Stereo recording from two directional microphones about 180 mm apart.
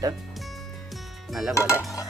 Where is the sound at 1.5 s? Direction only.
15° left (ahead or behind).